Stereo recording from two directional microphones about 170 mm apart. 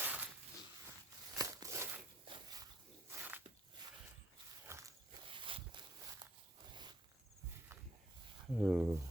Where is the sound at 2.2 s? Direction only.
25° right (ahead or behind).